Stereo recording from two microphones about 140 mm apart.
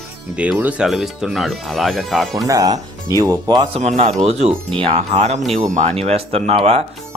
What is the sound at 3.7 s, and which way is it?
Speech, 50° right (ahead or behind).